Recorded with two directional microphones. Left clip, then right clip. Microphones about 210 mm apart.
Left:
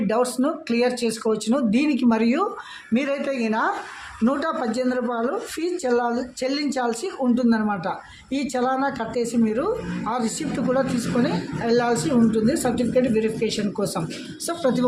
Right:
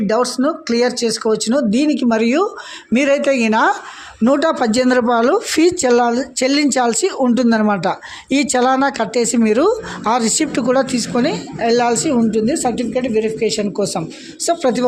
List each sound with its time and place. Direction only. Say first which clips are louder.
0.3 s speech: right 6 dB; 25° right (ahead or behind)